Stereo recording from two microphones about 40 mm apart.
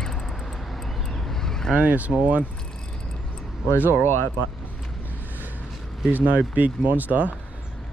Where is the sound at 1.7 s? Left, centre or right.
Right.